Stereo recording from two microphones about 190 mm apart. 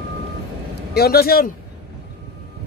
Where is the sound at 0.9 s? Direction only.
55° left (ahead or behind).